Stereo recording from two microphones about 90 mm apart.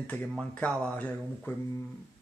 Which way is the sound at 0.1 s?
10° left (ahead or behind).